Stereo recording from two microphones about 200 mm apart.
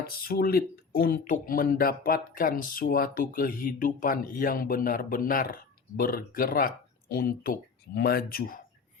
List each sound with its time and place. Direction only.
0.0 s speech: 50° left (ahead or behind)